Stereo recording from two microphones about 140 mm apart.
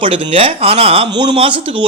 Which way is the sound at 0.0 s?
40° right (ahead or behind).